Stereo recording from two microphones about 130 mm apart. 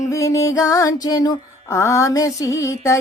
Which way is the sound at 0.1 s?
25° left (ahead or behind).